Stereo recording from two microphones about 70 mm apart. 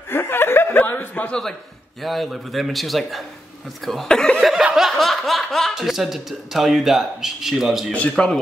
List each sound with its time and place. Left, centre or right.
0.1 s chuckle: left
2.0 s speech: centre
4.7 s speech: centre
7.9 s a man's voice: centre